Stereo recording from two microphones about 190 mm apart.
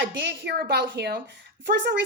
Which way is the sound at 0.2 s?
60° right (ahead or behind).